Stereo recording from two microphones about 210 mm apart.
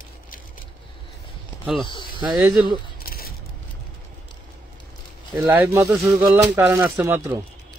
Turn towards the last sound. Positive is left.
turn(degrees=-10)  # may be behind; listen again after turning